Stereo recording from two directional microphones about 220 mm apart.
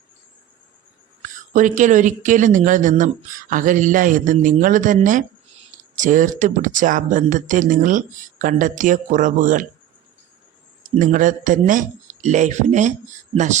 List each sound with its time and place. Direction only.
1.2 s speech: 35° right (ahead or behind)
10.9 s speech: 35° right (ahead or behind)